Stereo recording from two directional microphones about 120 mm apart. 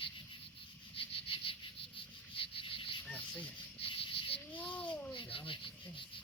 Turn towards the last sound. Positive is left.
turn(degrees=45)  # may be behind; listen again after turning